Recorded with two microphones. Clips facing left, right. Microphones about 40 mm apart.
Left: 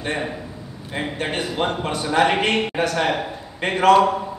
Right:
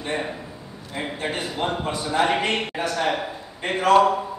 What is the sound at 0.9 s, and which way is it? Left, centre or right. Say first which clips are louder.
A man's voice: left 3 dB; left.